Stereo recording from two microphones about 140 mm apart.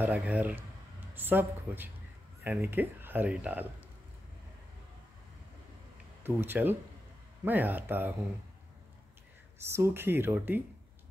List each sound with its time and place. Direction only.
0.0 s speech: 10° right (ahead or behind)
6.2 s speech: 15° right (ahead or behind)
9.6 s speech: 20° right (ahead or behind)